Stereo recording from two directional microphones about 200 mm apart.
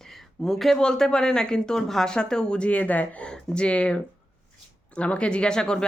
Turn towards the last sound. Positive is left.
turn(degrees=5)  # may be behind; listen again after turning